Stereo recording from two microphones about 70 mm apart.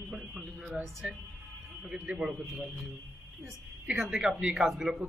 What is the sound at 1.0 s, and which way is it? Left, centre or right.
A man's voice, centre.